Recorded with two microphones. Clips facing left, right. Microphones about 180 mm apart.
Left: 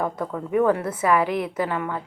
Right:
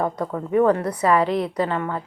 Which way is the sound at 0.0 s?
20° right (ahead or behind).